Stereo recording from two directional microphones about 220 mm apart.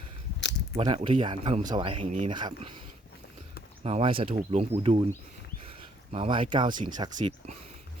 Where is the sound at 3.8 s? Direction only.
25° right (ahead or behind).